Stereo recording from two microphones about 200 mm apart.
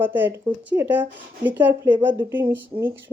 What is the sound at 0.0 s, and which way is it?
Speech, 10° right (ahead or behind).